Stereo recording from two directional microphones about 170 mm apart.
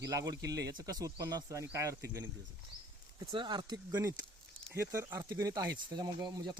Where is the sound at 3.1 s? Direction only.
25° right (ahead or behind).